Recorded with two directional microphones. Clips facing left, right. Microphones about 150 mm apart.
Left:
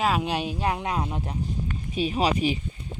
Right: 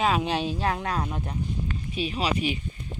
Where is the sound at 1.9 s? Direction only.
40° left (ahead or behind).